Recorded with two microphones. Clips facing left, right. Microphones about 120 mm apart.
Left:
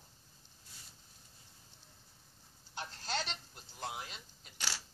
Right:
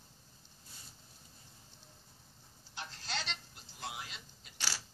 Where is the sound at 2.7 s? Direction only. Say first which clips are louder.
Left 3 dB; 45° left (ahead or behind).